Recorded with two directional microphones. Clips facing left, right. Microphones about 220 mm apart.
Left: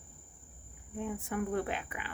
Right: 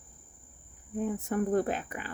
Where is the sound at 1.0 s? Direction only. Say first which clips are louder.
Right 5 dB; 40° right (ahead or behind).